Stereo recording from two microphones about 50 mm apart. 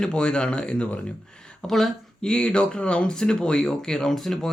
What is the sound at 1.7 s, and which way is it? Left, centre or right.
Speech, centre.